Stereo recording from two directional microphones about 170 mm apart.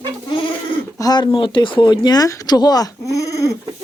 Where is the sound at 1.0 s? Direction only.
25° left (ahead or behind).